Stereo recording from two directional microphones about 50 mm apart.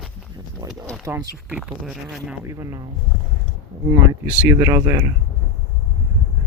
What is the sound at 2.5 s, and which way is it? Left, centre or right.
Speech, right.